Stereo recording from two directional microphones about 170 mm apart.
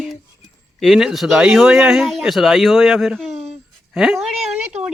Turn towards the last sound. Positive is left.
turn(degrees=-5)  # may be behind; listen again after turning